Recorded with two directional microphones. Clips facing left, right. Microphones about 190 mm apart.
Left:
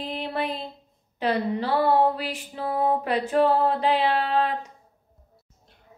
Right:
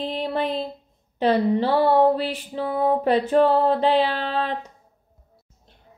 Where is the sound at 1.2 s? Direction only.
25° right (ahead or behind).